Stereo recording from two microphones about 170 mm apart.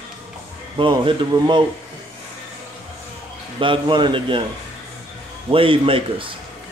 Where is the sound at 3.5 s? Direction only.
30° right (ahead or behind).